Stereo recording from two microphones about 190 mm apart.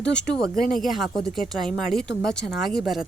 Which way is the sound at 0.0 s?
5° left (ahead or behind).